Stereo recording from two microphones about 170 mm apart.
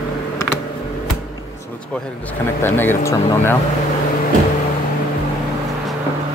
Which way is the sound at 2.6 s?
10° left (ahead or behind).